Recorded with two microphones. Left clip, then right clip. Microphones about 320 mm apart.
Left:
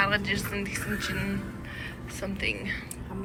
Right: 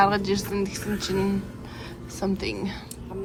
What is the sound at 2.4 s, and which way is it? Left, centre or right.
Speech, centre.